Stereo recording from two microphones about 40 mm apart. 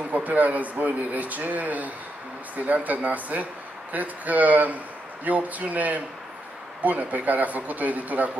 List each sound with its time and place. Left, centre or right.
0.1 s speech: right